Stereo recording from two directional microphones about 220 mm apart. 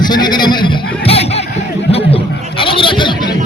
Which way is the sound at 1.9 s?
25° left (ahead or behind).